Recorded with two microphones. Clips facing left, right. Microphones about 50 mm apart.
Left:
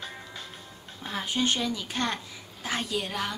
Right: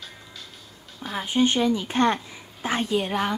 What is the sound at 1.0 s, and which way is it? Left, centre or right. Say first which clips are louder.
A woman's voice: right 6 dB; right.